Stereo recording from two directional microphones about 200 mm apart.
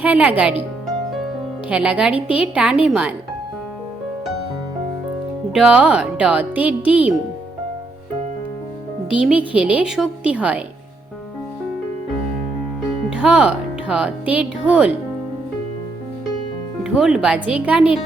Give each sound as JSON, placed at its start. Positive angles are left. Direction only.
{"t": 0.0, "sound": "a woman's voice", "side_deg": -5}
{"t": 1.7, "sound": "a woman's voice", "side_deg": -5}
{"t": 5.5, "sound": "speech", "side_deg": -5}
{"t": 9.0, "sound": "speech", "side_deg": -5}
{"t": 13.1, "sound": "speech", "side_deg": -5}
{"t": 16.8, "sound": "speech", "side_deg": -5}